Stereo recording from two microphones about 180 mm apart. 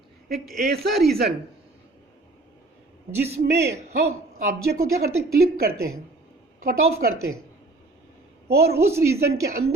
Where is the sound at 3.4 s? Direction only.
65° right (ahead or behind).